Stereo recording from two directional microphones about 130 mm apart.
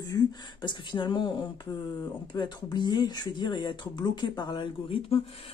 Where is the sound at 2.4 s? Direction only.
35° left (ahead or behind).